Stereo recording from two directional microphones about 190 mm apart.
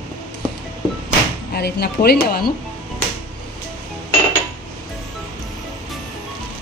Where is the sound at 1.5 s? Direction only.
55° left (ahead or behind).